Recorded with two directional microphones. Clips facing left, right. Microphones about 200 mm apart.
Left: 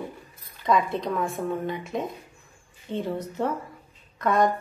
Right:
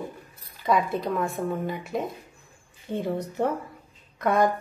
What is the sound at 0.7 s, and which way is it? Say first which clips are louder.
A woman's voice: even; 5° right (ahead or behind).